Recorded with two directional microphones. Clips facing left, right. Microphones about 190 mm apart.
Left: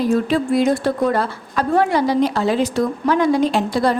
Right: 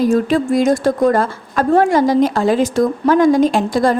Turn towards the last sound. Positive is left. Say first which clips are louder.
# right 3 dB
turn(degrees=-45)  # may be behind; listen again after turning